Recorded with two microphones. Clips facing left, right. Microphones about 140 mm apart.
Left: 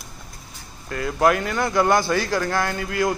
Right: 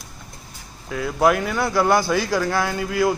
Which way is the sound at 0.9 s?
Centre (ahead or behind).